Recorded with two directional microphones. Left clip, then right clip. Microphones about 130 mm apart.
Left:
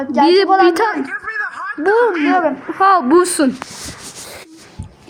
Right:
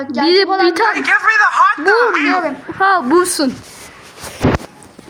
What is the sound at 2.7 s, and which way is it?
Speech, 10° left (ahead or behind).